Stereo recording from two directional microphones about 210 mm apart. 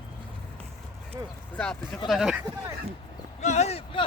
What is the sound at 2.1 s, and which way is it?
Speech, centre (ahead or behind).